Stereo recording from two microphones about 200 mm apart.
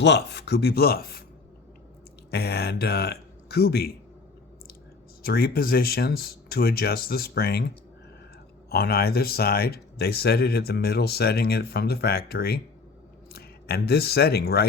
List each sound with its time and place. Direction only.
0.0 s speech: 55° left (ahead or behind)
2.3 s speech: 55° left (ahead or behind)
5.2 s speech: 50° left (ahead or behind)
8.7 s speech: 50° left (ahead or behind)